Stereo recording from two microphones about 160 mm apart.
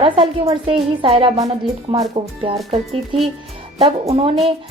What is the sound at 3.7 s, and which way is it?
Speech, 40° right (ahead or behind).